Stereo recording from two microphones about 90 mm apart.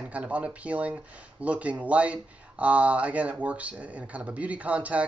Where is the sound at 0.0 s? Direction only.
15° right (ahead or behind).